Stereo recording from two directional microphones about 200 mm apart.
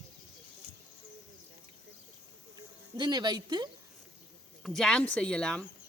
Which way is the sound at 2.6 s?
20° right (ahead or behind).